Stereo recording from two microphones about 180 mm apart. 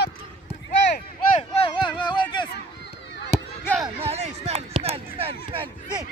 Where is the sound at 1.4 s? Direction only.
30° left (ahead or behind).